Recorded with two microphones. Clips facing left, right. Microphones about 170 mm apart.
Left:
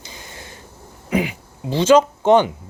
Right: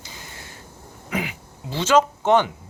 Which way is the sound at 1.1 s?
20° left (ahead or behind).